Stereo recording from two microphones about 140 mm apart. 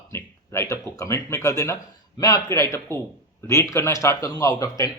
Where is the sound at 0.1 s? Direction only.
20° left (ahead or behind).